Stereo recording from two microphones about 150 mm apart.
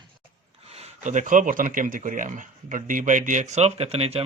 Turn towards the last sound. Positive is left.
turn(degrees=-40)  # may be behind; listen again after turning